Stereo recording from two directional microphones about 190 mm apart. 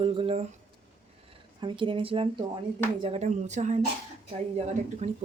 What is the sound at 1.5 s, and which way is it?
Speech, 25° right (ahead or behind).